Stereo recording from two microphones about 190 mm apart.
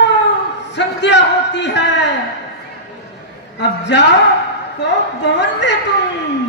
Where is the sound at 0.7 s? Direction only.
70° left (ahead or behind).